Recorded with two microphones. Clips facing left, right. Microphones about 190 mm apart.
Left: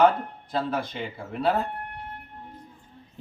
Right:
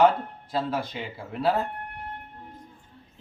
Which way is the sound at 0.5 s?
Centre (ahead or behind).